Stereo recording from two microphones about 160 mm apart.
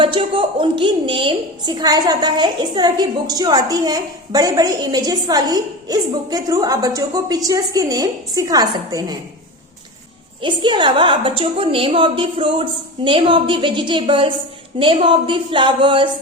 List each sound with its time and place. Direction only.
0.0 s a woman's voice: 30° right (ahead or behind)
10.4 s a woman's voice: 30° right (ahead or behind)